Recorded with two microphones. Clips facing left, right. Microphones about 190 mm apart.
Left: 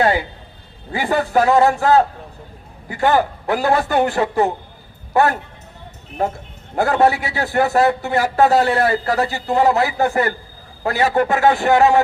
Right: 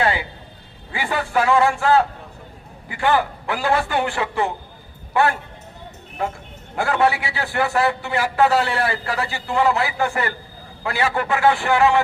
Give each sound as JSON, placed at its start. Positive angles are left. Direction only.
{"t": 0.0, "sound": "a man's voice", "side_deg": 40}